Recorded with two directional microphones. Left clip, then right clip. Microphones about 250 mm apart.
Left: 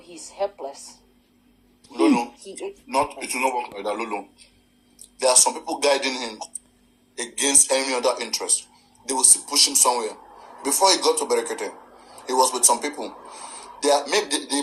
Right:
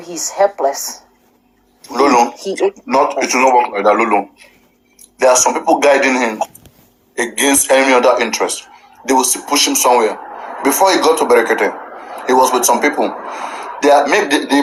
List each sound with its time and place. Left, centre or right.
0.0 s speech: right
1.8 s a sound: right
2.1 s speech: right
3.8 s speech: right
7.2 s a man's voice: right